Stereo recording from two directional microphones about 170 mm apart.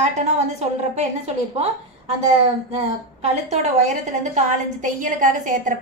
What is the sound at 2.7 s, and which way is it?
A woman's voice, 40° right (ahead or behind).